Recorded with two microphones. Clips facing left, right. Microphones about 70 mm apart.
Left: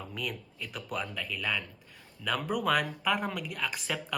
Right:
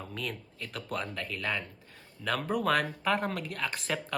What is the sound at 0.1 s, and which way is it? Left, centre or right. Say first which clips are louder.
Speech: even; centre.